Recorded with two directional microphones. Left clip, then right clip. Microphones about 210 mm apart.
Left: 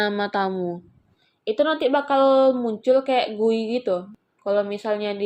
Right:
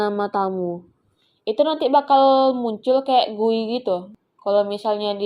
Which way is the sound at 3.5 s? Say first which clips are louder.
Right 1 dB; 10° left (ahead or behind).